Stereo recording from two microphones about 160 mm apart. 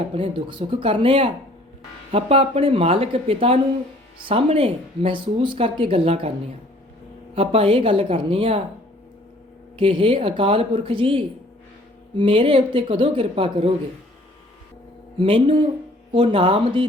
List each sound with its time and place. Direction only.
0.1 s speech: 35° right (ahead or behind)
7.3 s speech: 35° right (ahead or behind)
9.7 s speech: 35° right (ahead or behind)
15.2 s speech: 35° right (ahead or behind)